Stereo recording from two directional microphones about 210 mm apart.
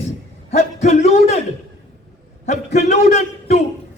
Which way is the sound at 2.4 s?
30° left (ahead or behind).